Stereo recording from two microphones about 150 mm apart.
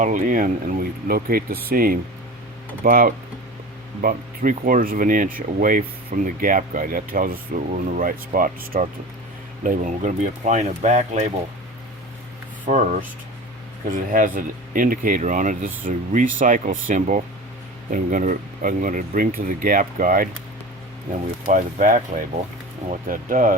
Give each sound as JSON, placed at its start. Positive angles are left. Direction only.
{"t": 0.0, "sound": "speech", "side_deg": -60}
{"t": 12.6, "sound": "speech", "side_deg": -60}
{"t": 21.5, "sound": "speech", "side_deg": -60}